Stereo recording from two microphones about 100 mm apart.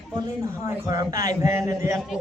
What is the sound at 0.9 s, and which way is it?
A man's voice, 35° right (ahead or behind).